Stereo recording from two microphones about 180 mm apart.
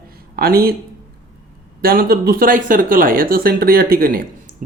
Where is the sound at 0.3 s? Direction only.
55° right (ahead or behind).